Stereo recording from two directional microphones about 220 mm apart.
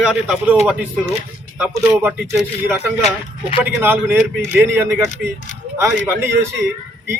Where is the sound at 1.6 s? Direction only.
10° right (ahead or behind).